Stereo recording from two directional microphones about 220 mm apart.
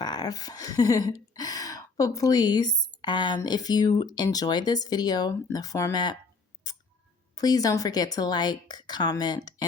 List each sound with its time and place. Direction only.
0.0 s speech: 20° left (ahead or behind)
6.6 s a sound: 15° left (ahead or behind)
7.3 s speech: 15° left (ahead or behind)